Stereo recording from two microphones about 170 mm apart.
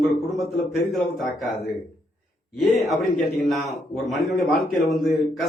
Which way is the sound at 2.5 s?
Centre (ahead or behind).